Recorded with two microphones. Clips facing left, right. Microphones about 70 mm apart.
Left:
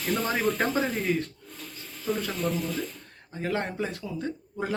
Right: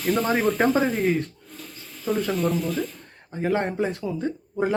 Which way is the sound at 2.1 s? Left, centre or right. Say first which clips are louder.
Right 4 dB; right.